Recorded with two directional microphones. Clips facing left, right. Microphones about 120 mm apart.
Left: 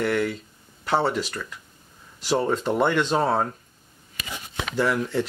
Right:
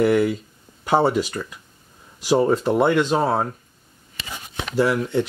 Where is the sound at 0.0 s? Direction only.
5° right (ahead or behind).